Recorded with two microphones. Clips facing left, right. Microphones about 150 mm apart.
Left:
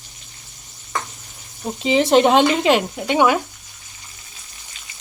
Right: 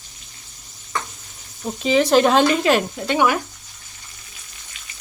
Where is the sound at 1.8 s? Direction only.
25° left (ahead or behind).